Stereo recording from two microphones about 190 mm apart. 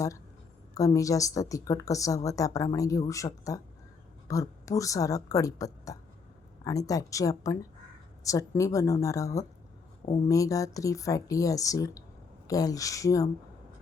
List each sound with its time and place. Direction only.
0.7 s a woman's voice: 15° left (ahead or behind)